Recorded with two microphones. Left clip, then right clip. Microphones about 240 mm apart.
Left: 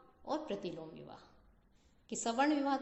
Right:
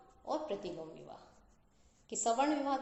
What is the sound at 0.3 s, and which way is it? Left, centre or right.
A man's voice, left.